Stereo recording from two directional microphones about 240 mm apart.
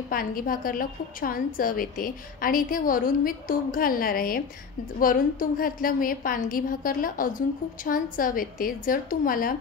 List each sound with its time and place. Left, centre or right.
0.1 s a woman's voice: left